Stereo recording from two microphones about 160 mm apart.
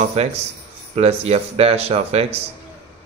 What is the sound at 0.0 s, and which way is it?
Speech, 40° right (ahead or behind).